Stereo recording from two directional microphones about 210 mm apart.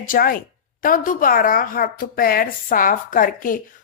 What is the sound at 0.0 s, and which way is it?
Speech, 40° left (ahead or behind).